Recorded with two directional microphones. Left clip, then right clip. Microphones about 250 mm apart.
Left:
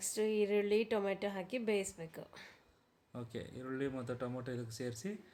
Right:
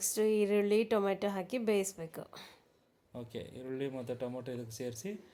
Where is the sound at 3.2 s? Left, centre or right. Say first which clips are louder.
Right 2 dB; centre.